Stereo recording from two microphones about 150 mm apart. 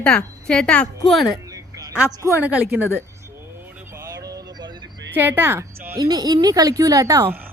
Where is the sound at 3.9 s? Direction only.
20° right (ahead or behind).